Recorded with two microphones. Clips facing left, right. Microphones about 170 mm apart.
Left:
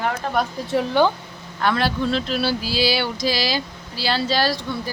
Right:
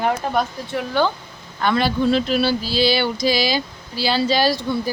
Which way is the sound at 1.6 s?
Centre (ahead or behind).